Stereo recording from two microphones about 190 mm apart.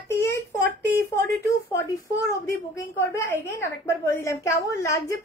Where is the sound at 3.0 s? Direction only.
15° left (ahead or behind).